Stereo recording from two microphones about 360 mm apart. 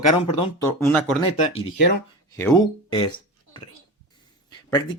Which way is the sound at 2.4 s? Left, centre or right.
Centre.